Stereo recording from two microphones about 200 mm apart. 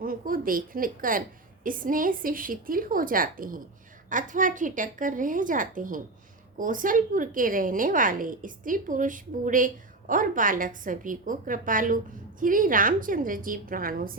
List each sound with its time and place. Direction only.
0.0 s a woman's voice: 45° right (ahead or behind)